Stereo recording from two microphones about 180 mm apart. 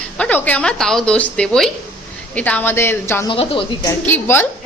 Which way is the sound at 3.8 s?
15° left (ahead or behind).